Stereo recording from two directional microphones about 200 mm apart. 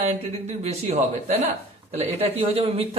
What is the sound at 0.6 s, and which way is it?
Speech, 35° right (ahead or behind).